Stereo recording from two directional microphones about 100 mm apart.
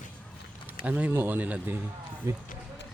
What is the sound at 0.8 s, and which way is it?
Speech, 15° right (ahead or behind).